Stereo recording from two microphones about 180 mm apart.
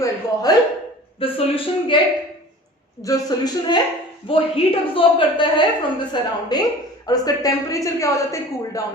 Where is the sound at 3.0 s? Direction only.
20° left (ahead or behind).